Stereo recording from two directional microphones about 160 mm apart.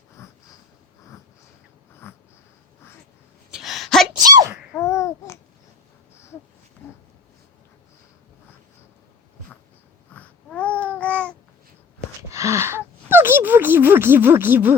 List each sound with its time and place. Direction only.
0.2 s sniff: 15° left (ahead or behind)
2.0 s wheeze: 15° left (ahead or behind)
3.5 s a sound: centre (ahead or behind)
4.8 s babbling: 15° left (ahead or behind)
10.2 s babbling: 10° left (ahead or behind)
12.3 s a sound: 20° right (ahead or behind)